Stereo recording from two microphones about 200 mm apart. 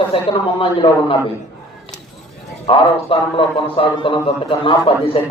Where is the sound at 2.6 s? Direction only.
25° left (ahead or behind).